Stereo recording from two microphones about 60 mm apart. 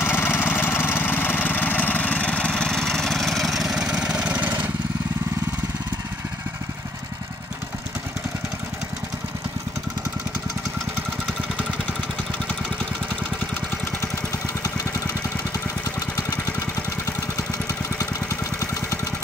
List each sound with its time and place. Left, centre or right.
0.0 s engine: left; by 4.5 s centre
16.3 s engine: left